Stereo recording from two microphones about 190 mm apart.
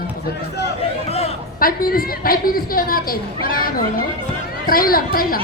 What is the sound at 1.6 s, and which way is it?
Speech, 50° left (ahead or behind).